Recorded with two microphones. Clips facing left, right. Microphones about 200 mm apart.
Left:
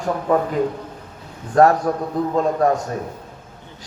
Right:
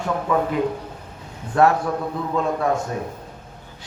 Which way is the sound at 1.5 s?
40° left (ahead or behind).